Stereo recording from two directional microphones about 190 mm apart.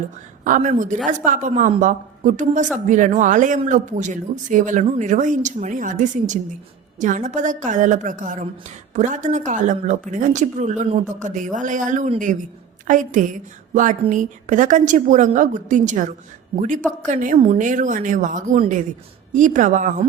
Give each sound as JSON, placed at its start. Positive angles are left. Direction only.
{"t": 0.4, "sound": "a woman's voice", "side_deg": -45}